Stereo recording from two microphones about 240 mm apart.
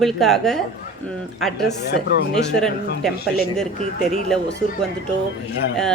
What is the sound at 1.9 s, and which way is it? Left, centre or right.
Speech, left.